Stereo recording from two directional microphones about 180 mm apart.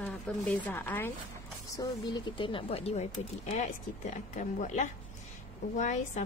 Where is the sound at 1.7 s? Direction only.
20° left (ahead or behind).